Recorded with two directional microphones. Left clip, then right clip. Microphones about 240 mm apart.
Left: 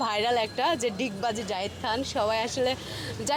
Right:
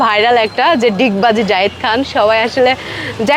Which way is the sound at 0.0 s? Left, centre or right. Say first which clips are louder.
Right 15 dB; right.